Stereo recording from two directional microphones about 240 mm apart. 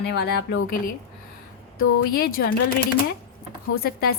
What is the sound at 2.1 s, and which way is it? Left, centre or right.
Speech, left.